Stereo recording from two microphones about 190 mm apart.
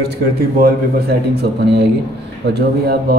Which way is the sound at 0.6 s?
55° right (ahead or behind).